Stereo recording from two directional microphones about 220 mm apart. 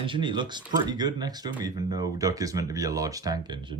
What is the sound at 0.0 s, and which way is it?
Speech, 20° right (ahead or behind).